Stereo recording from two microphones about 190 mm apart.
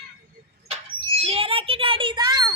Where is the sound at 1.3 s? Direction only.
30° right (ahead or behind).